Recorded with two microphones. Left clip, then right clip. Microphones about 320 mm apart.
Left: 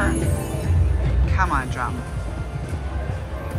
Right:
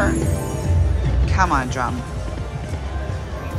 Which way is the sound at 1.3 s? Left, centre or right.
Centre.